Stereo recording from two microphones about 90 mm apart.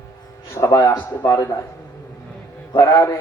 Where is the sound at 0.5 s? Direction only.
40° left (ahead or behind).